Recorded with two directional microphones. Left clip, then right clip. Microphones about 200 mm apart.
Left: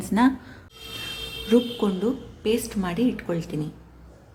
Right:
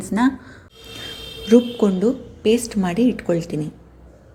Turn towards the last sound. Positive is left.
turn(degrees=-20)  # may be behind; listen again after turning